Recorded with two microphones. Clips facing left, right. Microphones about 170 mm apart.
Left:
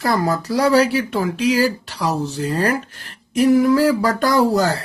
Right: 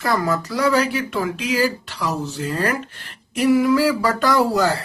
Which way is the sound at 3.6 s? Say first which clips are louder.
Left 2 dB; 45° left (ahead or behind).